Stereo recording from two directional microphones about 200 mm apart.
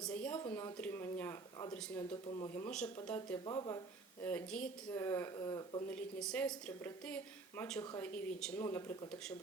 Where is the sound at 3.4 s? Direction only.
20° left (ahead or behind).